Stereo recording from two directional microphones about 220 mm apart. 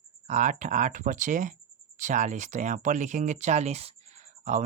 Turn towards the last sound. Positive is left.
turn(degrees=-30)  # may be behind; listen again after turning